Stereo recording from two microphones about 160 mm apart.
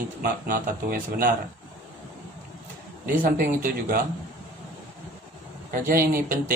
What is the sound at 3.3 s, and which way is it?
Speech, 65° right (ahead or behind).